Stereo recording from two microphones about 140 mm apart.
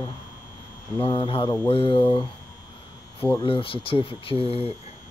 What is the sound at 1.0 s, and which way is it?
Speech, 40° left (ahead or behind).